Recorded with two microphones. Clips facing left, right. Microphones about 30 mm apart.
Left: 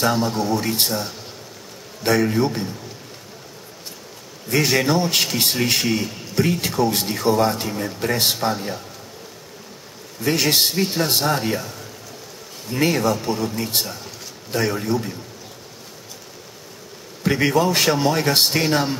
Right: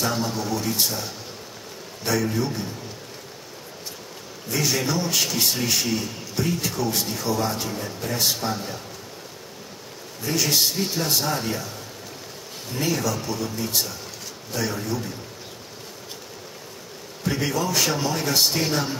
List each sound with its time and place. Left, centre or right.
0.0 s a man's voice: left
4.5 s a man's voice: left
8.0 s a man's voice: left
10.2 s a man's voice: left
12.7 s a man's voice: left
17.2 s a man's voice: left